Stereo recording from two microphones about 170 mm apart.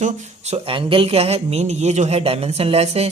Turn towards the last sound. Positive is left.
turn(degrees=-35)  # may be behind; listen again after turning